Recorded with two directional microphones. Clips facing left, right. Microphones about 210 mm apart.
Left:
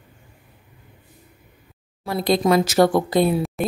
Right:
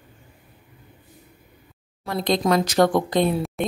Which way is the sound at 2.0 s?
5° left (ahead or behind).